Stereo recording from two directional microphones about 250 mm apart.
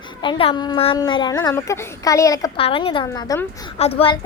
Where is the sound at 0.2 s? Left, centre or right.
Left.